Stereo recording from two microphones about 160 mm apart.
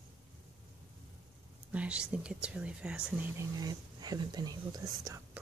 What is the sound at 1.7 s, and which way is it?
Speech, 5° right (ahead or behind).